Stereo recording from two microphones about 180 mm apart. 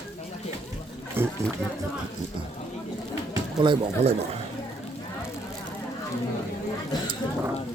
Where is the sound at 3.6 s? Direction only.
30° right (ahead or behind).